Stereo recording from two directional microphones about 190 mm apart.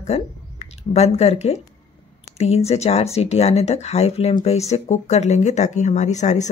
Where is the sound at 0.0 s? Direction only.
35° left (ahead or behind).